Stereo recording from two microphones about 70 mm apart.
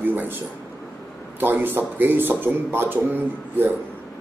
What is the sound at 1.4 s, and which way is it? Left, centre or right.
A man's voice, right.